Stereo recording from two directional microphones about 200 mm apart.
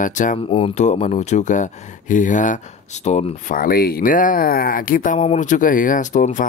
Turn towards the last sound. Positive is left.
turn(degrees=40)  # may be behind; listen again after turning